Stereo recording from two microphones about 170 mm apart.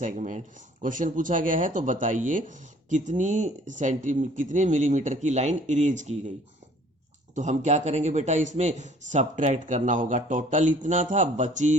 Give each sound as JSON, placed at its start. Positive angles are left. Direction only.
{"t": 0.0, "sound": "speech", "side_deg": -45}
{"t": 7.3, "sound": "speech", "side_deg": -45}